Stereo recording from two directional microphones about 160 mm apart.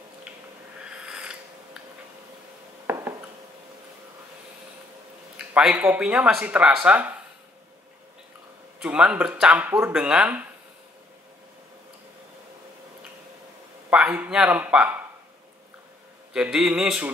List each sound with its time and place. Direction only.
0.7 s filing: 5° right (ahead or behind)
2.9 s a sound: 15° right (ahead or behind)
5.4 s speech: 5° right (ahead or behind)
8.8 s speech: 5° right (ahead or behind)
13.8 s speech: 10° right (ahead or behind)
16.3 s a man's voice: 5° right (ahead or behind)